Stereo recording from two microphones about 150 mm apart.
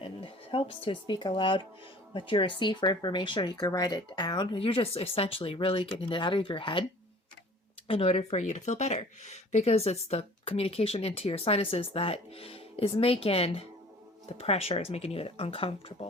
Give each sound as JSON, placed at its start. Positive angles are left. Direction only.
{"t": 0.0, "sound": "speech", "side_deg": 35}
{"t": 7.9, "sound": "speech", "side_deg": 40}